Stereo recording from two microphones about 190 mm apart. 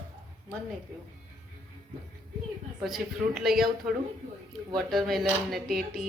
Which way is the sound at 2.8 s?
Centre (ahead or behind).